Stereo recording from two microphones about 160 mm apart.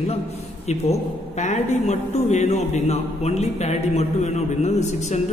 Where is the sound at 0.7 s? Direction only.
45° left (ahead or behind).